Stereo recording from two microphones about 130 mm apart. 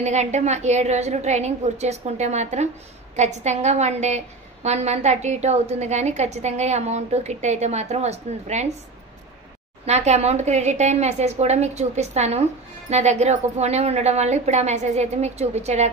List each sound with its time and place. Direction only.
0.0 s a woman's voice: 60° right (ahead or behind)
9.8 s a woman's voice: 55° right (ahead or behind)